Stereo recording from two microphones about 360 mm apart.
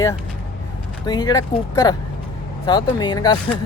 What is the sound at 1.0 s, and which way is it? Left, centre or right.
Speech, centre.